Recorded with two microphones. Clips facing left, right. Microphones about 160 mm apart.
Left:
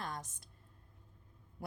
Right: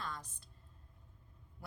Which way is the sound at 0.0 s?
45° left (ahead or behind).